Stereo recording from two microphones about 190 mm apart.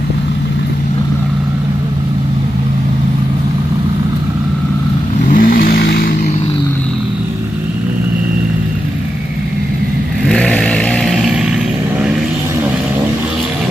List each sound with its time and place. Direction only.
5.3 s vehicle: 50° left (ahead or behind)
10.2 s vehicle: 5° left (ahead or behind)